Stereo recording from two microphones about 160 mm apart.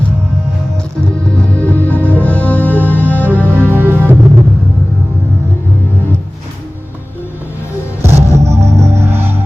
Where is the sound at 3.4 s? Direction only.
15° right (ahead or behind).